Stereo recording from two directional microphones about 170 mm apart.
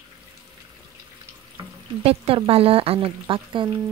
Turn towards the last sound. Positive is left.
turn(degrees=-30)  # may be behind; listen again after turning